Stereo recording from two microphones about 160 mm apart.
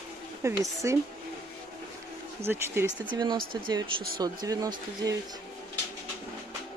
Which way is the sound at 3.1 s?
30° right (ahead or behind).